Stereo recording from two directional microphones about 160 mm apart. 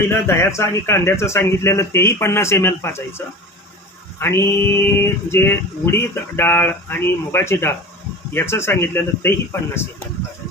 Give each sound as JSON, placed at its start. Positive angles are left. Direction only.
{"t": 0.3, "sound": "speech", "side_deg": 15}